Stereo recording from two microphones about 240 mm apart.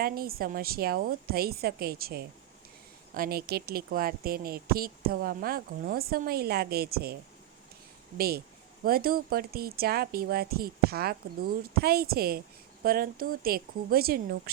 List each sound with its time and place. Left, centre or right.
0.0 s speech: right
8.8 s speech: right